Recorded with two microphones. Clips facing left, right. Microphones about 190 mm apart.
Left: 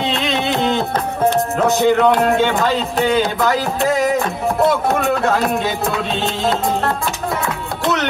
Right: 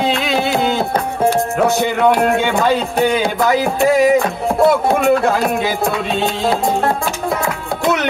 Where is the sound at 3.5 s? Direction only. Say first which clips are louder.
Right 3 dB; 5° right (ahead or behind).